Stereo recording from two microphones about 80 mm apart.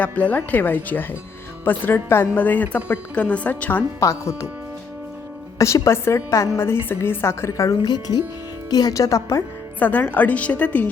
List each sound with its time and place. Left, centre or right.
0.0 s a woman's voice: centre
4.0 s a woman's voice: left
5.5 s a woman's voice: left
7.9 s speech: left
8.7 s speech: left
9.8 s a woman's voice: left